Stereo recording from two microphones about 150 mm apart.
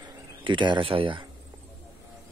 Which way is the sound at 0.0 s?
30° right (ahead or behind).